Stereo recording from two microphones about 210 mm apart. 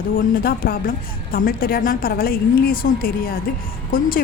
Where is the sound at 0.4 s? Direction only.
45° left (ahead or behind).